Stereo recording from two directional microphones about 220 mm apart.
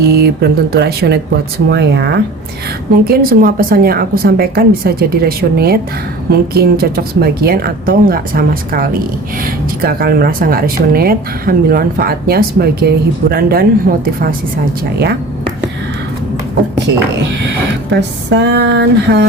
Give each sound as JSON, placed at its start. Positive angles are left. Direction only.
{"t": 0.0, "sound": "speech", "side_deg": -45}
{"t": 18.3, "sound": "speech", "side_deg": -55}